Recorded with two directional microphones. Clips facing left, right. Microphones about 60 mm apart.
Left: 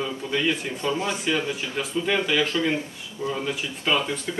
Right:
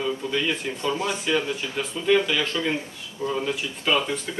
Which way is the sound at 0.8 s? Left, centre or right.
Left.